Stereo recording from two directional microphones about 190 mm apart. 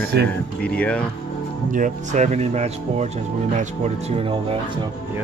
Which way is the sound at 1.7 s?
40° right (ahead or behind).